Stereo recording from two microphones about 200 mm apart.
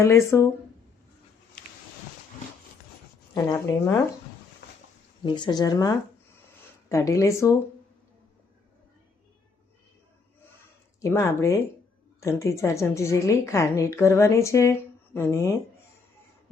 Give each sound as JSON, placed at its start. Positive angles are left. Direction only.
{"t": 0.0, "sound": "a woman's voice", "side_deg": 15}
{"t": 3.3, "sound": "speech", "side_deg": 20}
{"t": 5.2, "sound": "a woman's voice", "side_deg": 20}
{"t": 11.0, "sound": "a woman's voice", "side_deg": 15}